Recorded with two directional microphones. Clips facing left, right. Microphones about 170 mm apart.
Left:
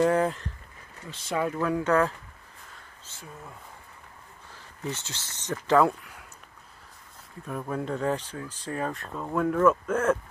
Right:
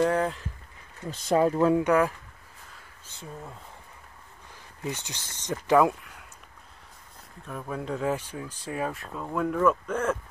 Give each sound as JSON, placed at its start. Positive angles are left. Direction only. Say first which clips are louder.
{"t": 0.0, "sound": "speech", "louder": "left 2 dB", "side_deg": 0}
{"t": 1.3, "sound": "speech", "louder": "right 6 dB", "side_deg": -35}
{"t": 1.9, "sound": "speech", "louder": "right 1 dB", "side_deg": -10}
{"t": 4.8, "sound": "speech", "louder": "even", "side_deg": -15}
{"t": 7.4, "sound": "speech", "louder": "left 2 dB", "side_deg": 5}